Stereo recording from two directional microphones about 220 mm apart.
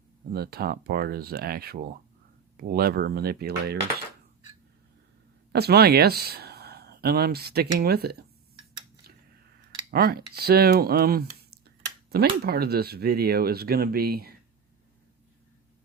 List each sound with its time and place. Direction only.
0.3 s speech: 45° right (ahead or behind)
5.5 s speech: 45° right (ahead or behind)
9.9 s speech: 45° right (ahead or behind)